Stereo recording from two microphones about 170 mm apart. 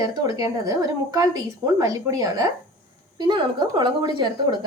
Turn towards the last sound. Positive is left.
turn(degrees=-25)  # may be behind; listen again after turning